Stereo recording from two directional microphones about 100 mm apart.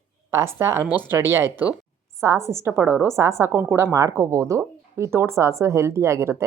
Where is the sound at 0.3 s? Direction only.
25° right (ahead or behind).